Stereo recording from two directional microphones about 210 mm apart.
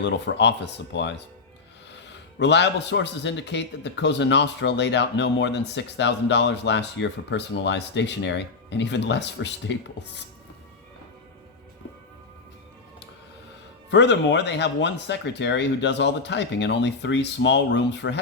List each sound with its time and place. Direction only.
0.0 s a man's voice: 55° left (ahead or behind)
13.9 s a man's voice: 55° left (ahead or behind)